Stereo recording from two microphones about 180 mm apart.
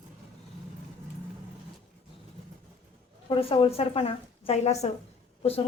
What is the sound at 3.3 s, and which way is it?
A woman's voice, 30° left (ahead or behind).